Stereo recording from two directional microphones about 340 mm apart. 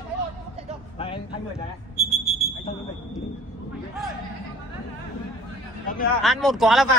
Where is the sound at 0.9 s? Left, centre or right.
Centre.